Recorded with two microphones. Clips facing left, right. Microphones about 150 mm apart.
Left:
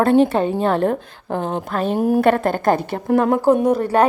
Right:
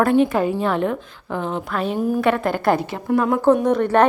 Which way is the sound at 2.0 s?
60° left (ahead or behind).